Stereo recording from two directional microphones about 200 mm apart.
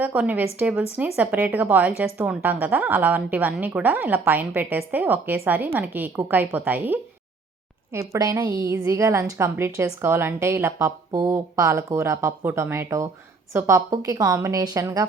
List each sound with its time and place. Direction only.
0.0 s a woman's voice: 5° right (ahead or behind)